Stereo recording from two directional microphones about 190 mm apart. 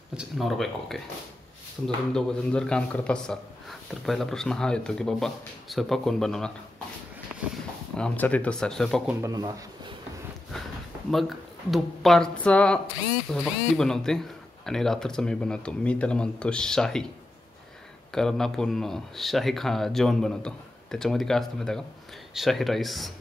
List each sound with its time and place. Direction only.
0.1 s a man's voice: 5° right (ahead or behind)
2.1 s a man's voice: 5° left (ahead or behind)
7.9 s a man's voice: 5° left (ahead or behind)
9.2 s speech: 20° right (ahead or behind)
10.5 s a sound: 5° left (ahead or behind)
11.1 s a man's voice: centre (ahead or behind)
18.1 s a man's voice: centre (ahead or behind)